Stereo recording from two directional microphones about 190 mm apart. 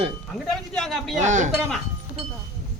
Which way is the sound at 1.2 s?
40° right (ahead or behind).